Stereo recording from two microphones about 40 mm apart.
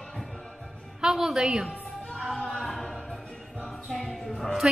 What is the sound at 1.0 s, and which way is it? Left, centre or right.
Speech, centre.